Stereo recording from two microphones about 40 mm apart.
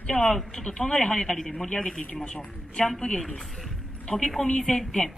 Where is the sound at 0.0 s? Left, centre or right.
Left.